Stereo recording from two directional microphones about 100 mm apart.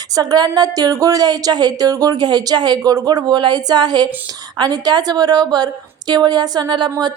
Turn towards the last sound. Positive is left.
turn(degrees=-45)  # may be behind; listen again after turning